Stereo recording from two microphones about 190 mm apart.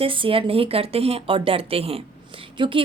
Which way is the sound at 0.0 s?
30° right (ahead or behind).